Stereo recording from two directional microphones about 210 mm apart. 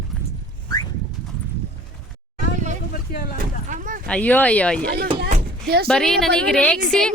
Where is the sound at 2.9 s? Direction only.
45° left (ahead or behind).